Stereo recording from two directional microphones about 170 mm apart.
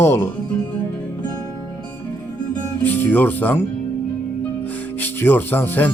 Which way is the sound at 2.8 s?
10° left (ahead or behind).